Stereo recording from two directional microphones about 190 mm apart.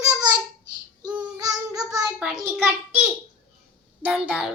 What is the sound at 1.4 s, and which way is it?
Child singing, 20° right (ahead or behind).